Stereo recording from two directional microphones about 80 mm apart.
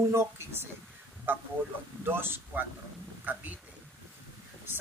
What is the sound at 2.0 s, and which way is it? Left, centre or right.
Speech, right.